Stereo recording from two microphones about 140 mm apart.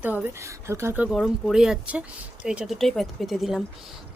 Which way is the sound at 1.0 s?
Centre (ahead or behind).